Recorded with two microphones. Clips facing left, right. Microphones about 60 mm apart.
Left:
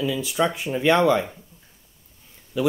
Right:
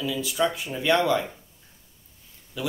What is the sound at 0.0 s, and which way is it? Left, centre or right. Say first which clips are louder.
Speech: left 2 dB; left.